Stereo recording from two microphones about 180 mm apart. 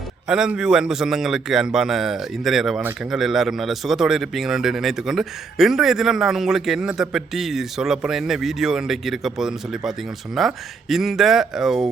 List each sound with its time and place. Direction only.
0.3 s a man's voice: 5° right (ahead or behind)